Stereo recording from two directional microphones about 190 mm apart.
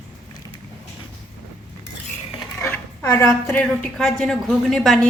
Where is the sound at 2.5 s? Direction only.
5° left (ahead or behind).